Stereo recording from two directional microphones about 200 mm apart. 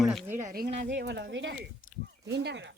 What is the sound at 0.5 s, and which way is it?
Speech, 55° right (ahead or behind).